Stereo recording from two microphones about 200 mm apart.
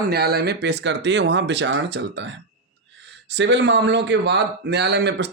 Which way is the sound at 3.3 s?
60° right (ahead or behind).